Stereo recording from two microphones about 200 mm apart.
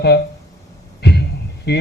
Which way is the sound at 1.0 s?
55° left (ahead or behind).